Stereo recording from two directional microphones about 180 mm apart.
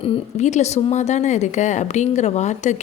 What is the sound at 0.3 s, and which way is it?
Speech, 40° left (ahead or behind).